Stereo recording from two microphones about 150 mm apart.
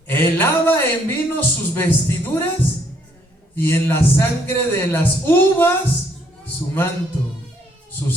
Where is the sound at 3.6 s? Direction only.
15° left (ahead or behind).